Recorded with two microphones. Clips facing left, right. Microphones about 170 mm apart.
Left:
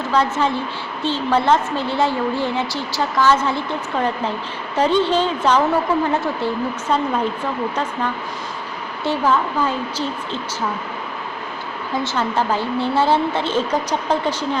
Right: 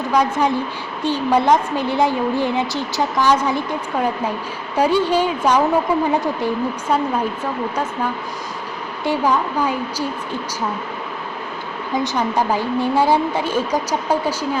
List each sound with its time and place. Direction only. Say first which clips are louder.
0.1 s a woman's voice: right 1 dB; 15° right (ahead or behind)
9.0 s a woman's voice: even; 15° right (ahead or behind)
12.0 s a woman's voice: right 1 dB; 15° right (ahead or behind)